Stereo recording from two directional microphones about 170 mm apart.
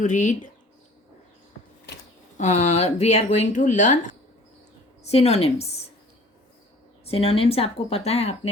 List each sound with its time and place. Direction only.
0.0 s speech: 45° left (ahead or behind)
2.4 s speech: 40° left (ahead or behind)
5.0 s speech: 40° left (ahead or behind)
7.0 s speech: 35° left (ahead or behind)